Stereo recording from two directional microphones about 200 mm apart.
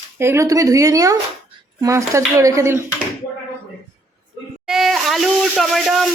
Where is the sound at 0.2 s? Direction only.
15° right (ahead or behind).